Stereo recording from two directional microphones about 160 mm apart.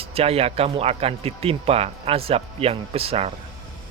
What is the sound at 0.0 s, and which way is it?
Speech, 40° right (ahead or behind).